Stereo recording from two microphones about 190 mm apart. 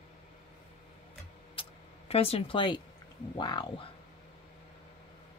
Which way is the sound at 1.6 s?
30° left (ahead or behind).